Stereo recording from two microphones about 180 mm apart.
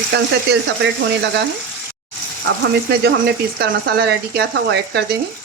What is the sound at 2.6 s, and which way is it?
Speech, 65° right (ahead or behind).